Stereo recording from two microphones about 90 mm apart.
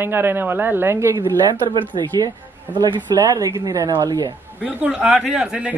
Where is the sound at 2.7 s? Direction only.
55° right (ahead or behind).